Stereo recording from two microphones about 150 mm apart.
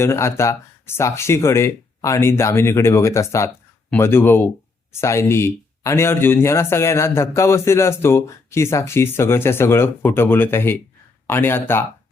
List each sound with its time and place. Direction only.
0.0 s speech: 15° left (ahead or behind)